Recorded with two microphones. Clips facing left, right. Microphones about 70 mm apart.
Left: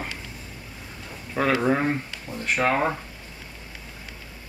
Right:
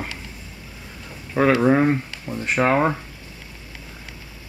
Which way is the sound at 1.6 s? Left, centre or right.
Centre.